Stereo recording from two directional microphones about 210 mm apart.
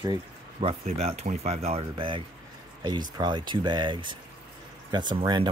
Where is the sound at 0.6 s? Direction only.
30° right (ahead or behind).